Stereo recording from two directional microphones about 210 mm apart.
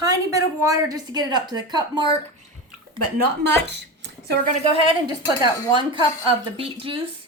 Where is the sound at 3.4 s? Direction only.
55° right (ahead or behind).